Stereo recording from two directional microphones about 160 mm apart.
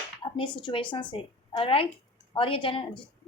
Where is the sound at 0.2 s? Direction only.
30° left (ahead or behind).